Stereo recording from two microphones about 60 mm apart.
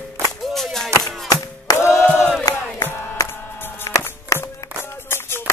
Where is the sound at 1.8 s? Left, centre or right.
Left.